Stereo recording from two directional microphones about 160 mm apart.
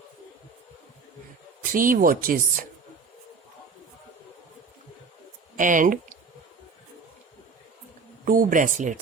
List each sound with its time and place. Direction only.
1.7 s speech: 60° right (ahead or behind)
5.5 s speech: 55° right (ahead or behind)
8.2 s speech: 55° right (ahead or behind)